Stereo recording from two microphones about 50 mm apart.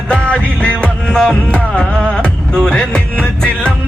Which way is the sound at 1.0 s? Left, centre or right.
Centre.